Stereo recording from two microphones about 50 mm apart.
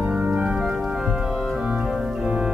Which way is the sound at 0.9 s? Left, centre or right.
Centre.